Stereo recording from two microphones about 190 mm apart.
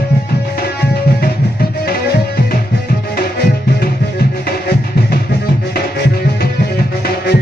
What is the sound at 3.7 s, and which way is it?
Music, 55° left (ahead or behind).